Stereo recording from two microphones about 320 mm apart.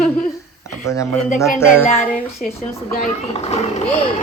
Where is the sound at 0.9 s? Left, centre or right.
Centre.